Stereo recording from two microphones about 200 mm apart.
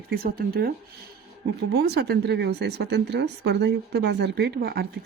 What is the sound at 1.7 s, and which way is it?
Speech, 55° right (ahead or behind).